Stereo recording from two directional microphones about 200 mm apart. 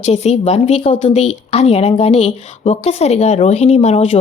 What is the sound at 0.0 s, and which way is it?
A woman's voice, 30° left (ahead or behind).